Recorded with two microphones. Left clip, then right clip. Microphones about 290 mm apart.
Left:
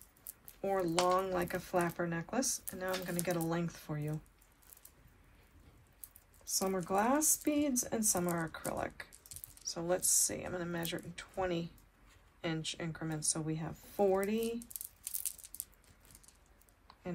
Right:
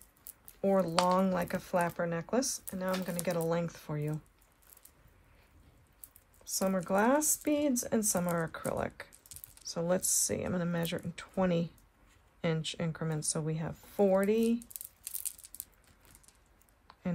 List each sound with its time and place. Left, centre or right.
0.6 s speech: centre
6.4 s speech: right